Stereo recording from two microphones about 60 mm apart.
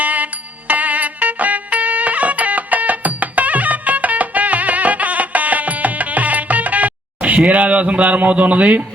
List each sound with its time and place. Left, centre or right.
0.0 s music: right